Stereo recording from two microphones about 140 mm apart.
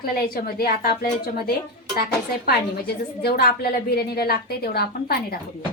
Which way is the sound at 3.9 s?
90° left.